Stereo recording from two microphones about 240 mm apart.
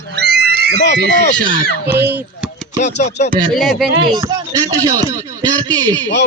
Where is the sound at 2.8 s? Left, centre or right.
Left.